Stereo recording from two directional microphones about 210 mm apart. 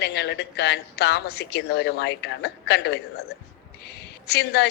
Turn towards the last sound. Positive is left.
turn(degrees=50)  # may be behind; listen again after turning